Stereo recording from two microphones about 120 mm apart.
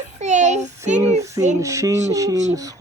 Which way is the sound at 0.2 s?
80° right.